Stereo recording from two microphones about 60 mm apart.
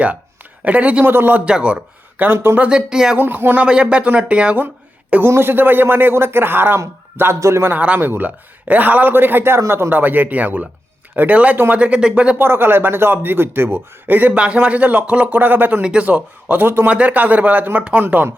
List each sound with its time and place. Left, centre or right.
0.6 s speech: right
1.0 s a man's voice: right
1.5 s speech: centre; by 2.6 s right
2.6 s speech: centre
3.2 s a man's voice: right
3.7 s speech: centre
5.3 s a man's voice: right
7.3 s a man's voice: right
7.6 s a man's voice: right
9.9 s speech: right
12.4 s a man's voice: right
14.3 s speech: centre
15.8 s speech: centre; by 16.9 s right
16.9 s speech: right